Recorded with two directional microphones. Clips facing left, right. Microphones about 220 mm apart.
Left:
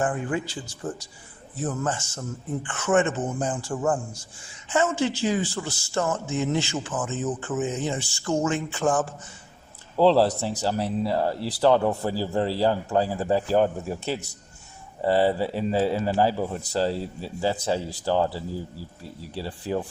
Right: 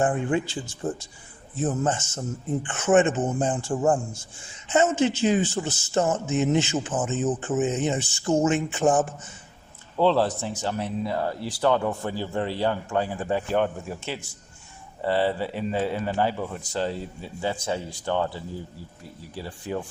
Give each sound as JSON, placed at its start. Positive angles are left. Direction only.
{"t": 0.0, "sound": "speech", "side_deg": -25}
{"t": 10.0, "sound": "a man's voice", "side_deg": 35}